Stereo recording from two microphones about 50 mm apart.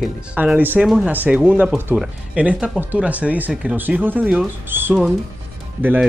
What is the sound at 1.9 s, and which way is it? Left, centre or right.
Speech, right.